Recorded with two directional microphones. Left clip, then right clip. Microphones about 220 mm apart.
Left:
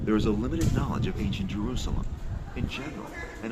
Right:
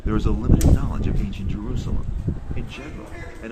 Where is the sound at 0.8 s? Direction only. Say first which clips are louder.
Right 1 dB; 15° left (ahead or behind).